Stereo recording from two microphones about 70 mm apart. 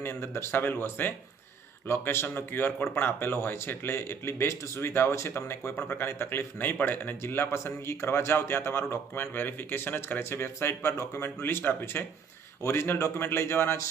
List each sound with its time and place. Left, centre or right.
0.0 s a man's voice: left